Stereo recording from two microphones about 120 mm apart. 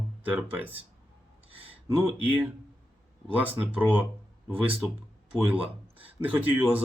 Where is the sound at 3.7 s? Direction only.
10° right (ahead or behind).